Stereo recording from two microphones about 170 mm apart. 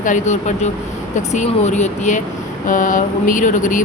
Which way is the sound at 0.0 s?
45° left (ahead or behind).